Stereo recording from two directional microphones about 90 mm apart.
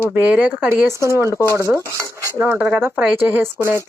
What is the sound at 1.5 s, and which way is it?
Cutlery, 30° right (ahead or behind).